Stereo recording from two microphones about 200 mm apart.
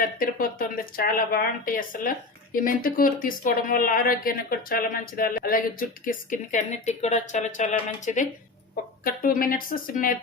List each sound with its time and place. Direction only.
0.2 s a woman's voice: 45° left (ahead or behind)